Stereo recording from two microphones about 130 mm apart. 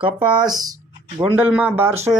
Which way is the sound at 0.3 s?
30° right (ahead or behind).